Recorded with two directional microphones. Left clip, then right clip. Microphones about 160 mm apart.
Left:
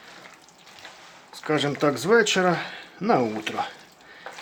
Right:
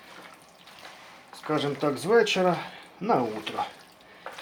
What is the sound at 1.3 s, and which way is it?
Speech, 35° left (ahead or behind).